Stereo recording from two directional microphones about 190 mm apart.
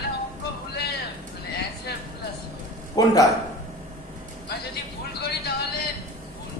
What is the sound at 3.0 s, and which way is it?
Speech, 20° left (ahead or behind).